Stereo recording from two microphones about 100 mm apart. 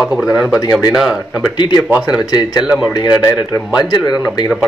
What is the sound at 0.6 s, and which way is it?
Speech, 35° left (ahead or behind).